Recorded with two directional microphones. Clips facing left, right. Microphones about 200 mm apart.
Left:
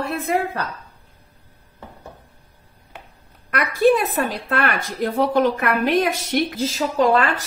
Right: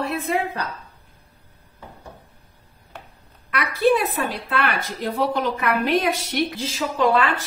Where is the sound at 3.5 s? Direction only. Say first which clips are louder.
Left 2 dB; 45° left (ahead or behind).